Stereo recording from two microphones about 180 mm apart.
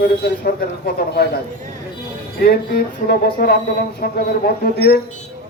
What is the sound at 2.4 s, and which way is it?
Speech, 60° left (ahead or behind).